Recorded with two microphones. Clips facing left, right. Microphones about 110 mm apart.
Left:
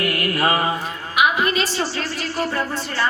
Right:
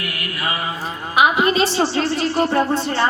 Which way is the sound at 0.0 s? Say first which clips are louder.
Left 6 dB; 40° left (ahead or behind).